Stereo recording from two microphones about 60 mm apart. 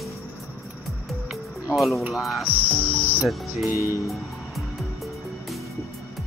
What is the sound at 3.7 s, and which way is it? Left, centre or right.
Music, left.